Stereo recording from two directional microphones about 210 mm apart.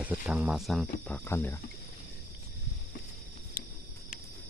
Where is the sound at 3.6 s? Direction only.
45° left (ahead or behind).